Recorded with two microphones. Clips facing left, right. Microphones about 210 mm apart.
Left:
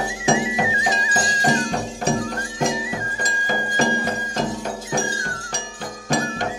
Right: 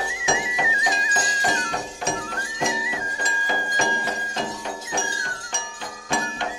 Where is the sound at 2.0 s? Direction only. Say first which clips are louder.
Left 8 dB; 35° left (ahead or behind).